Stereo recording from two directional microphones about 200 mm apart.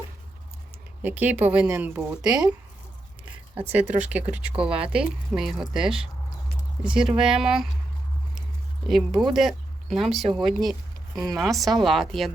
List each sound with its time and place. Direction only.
1.0 s speech: 10° right (ahead or behind)
3.7 s speech: 10° right (ahead or behind)
8.9 s speech: centre (ahead or behind)
11.2 s speech: 20° right (ahead or behind)
11.4 s speech: centre (ahead or behind)